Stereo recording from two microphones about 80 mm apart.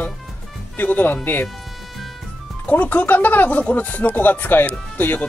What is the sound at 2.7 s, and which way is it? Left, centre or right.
Speech, left.